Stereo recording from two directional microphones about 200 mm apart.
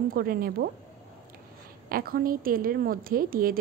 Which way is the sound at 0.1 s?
45° right (ahead or behind).